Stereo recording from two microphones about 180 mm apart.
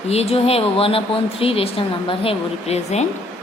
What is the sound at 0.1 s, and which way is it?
Speech, 35° left (ahead or behind).